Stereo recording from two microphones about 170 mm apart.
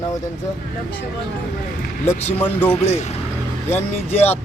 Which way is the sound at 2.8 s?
40° left (ahead or behind).